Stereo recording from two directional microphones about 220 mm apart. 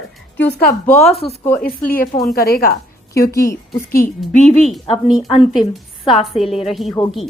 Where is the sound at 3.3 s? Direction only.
15° left (ahead or behind).